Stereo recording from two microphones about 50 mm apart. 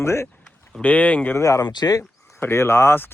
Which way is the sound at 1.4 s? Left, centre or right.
Left.